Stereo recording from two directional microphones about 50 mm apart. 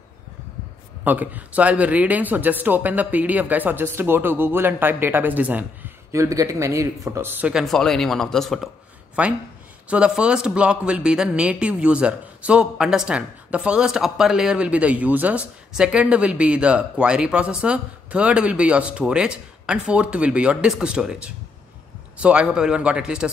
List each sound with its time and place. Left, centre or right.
1.0 s speech: right
6.1 s speech: right
7.2 s speech: right
7.6 s speech: centre
9.2 s speech: right
13.5 s speech: right
13.7 s speech: centre